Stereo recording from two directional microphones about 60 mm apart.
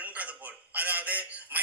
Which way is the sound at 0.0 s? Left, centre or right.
Right.